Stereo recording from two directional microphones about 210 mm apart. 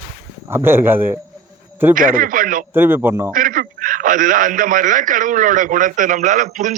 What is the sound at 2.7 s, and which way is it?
Speech, 10° right (ahead or behind).